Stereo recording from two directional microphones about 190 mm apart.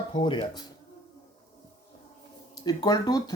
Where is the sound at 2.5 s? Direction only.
20° left (ahead or behind).